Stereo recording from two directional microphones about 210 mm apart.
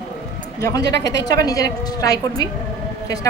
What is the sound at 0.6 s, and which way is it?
A woman's voice, 15° left (ahead or behind).